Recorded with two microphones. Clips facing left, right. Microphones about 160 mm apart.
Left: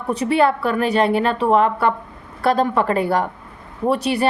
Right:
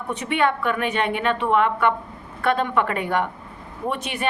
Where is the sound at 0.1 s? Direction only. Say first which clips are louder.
Left 5 dB; 35° left (ahead or behind).